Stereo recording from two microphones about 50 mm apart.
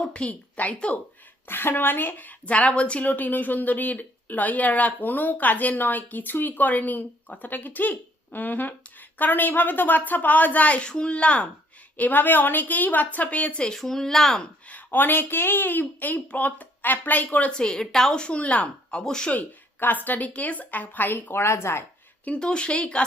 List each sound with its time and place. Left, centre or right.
0.1 s a woman's voice: left
1.5 s a woman's voice: left
11.9 s a woman's voice: left
13.7 s a woman's voice: centre
14.7 s a woman's voice: left
17.6 s a woman's voice: centre
19.3 s a woman's voice: left
21.4 s speech: left
22.4 s a woman's voice: centre